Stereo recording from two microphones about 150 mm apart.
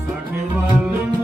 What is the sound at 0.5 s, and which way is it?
Music, 10° right (ahead or behind).